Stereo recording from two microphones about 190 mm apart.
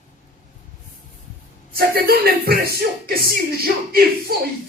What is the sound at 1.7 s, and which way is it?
Speech, 55° right (ahead or behind).